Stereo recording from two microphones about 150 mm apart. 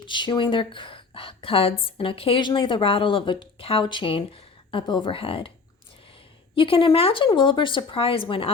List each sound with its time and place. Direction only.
0.0 s a woman's voice: 30° left (ahead or behind)
6.6 s a woman's voice: 35° left (ahead or behind)